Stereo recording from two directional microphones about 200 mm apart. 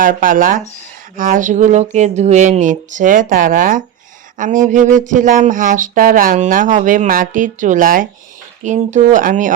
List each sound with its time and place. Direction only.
0.0 s speech: 40° right (ahead or behind)